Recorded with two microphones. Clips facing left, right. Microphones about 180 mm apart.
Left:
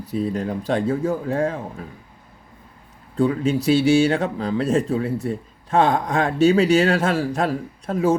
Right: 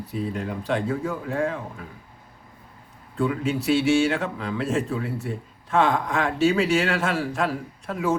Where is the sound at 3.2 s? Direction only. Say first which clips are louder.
Left 5 dB; 35° left (ahead or behind).